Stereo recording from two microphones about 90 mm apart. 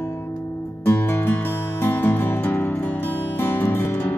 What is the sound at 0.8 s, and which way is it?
Music, 20° left (ahead or behind).